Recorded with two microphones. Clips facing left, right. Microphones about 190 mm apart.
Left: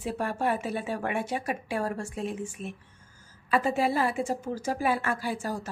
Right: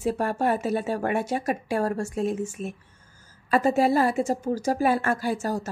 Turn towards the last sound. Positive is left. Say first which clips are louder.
# right 5 dB
turn(degrees=-45)  # may be behind; listen again after turning